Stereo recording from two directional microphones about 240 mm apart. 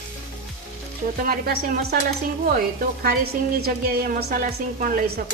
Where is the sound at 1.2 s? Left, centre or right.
Right.